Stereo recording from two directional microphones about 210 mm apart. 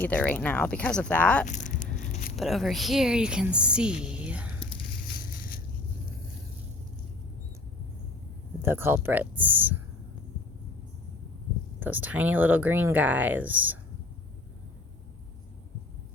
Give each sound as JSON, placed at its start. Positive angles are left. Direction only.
{"t": 0.0, "sound": "speech", "side_deg": 5}
{"t": 1.5, "sound": "a sound", "side_deg": 35}
{"t": 2.3, "sound": "a woman's voice", "side_deg": 0}
{"t": 5.0, "sound": "crushing", "side_deg": 45}
{"t": 8.6, "sound": "speech", "side_deg": -10}
{"t": 11.8, "sound": "speech", "side_deg": -10}